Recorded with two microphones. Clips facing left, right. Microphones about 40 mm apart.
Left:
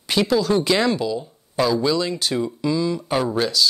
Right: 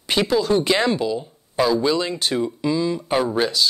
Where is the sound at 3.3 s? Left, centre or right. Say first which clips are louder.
Even; centre.